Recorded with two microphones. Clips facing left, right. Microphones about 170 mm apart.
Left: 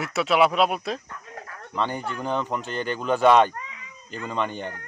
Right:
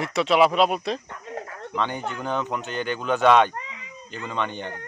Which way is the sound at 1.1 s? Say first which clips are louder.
Right 5 dB; 25° right (ahead or behind).